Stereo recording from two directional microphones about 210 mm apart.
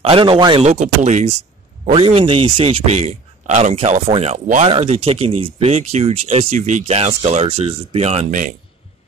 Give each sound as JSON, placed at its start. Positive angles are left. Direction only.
{"t": 0.1, "sound": "speech", "side_deg": -25}